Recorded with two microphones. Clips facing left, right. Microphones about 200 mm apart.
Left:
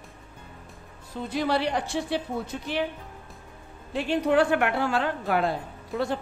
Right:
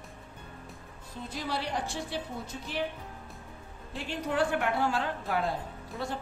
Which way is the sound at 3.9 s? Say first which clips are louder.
Left 8 dB; 70° left (ahead or behind).